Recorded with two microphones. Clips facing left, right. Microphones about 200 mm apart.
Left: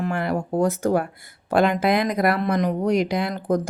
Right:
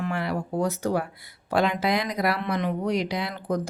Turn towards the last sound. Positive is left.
turn(degrees=45)  # may be behind; listen again after turning